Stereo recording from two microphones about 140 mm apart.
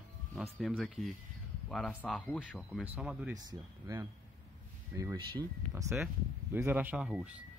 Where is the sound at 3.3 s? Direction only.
25° right (ahead or behind).